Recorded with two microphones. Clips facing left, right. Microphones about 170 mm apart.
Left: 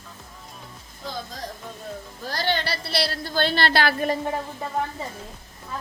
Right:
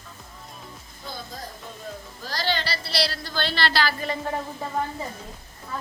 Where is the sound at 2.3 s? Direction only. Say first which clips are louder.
Left 2 dB; 55° left (ahead or behind).